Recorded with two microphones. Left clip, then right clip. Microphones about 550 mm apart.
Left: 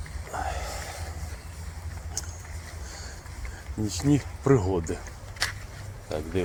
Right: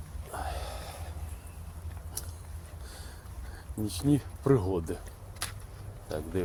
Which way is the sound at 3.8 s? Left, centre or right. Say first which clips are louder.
Left 3 dB; right.